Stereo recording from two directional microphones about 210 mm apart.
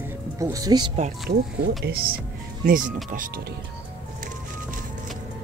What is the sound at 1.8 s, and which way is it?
Speech, 45° right (ahead or behind).